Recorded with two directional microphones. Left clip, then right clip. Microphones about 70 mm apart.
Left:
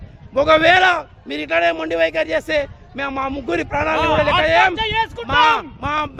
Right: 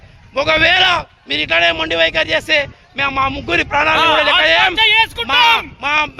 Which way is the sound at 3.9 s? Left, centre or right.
Right.